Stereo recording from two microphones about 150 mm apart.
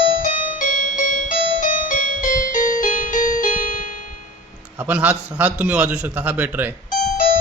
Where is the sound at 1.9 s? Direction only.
60° left (ahead or behind).